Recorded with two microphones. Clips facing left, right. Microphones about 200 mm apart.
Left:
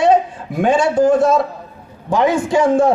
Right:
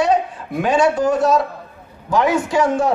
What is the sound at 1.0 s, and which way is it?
Speech, 50° left (ahead or behind).